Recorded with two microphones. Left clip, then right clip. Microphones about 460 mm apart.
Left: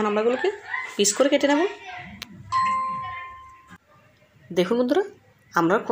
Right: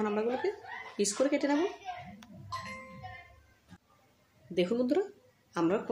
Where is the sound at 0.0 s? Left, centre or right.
Left.